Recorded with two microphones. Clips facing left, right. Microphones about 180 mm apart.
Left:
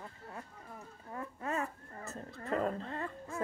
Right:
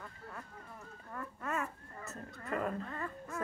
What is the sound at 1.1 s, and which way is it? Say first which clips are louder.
Speech: left 2 dB; 30° left (ahead or behind).